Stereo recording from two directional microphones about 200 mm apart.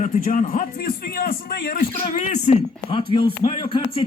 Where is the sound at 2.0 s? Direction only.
40° left (ahead or behind).